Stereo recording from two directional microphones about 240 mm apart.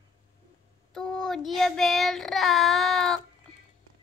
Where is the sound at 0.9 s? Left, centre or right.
Centre.